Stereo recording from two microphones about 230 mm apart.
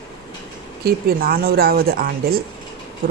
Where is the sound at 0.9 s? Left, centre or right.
Right.